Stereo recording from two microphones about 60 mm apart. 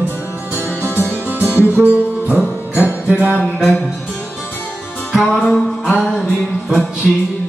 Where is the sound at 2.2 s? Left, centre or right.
Right.